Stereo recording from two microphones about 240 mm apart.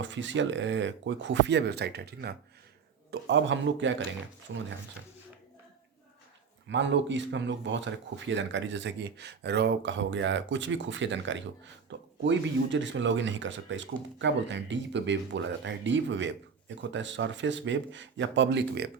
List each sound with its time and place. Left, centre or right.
0.0 s speech: right
6.7 s speech: right